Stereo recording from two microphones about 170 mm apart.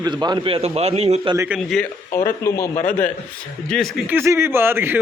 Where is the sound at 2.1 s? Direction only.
15° left (ahead or behind).